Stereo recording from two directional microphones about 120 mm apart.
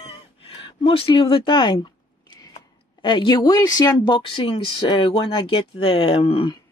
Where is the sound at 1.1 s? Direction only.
45° left (ahead or behind).